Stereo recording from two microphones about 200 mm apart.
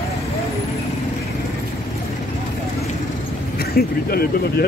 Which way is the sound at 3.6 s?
50° left (ahead or behind).